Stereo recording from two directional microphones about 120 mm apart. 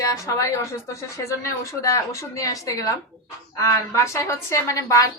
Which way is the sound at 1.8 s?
25° left (ahead or behind).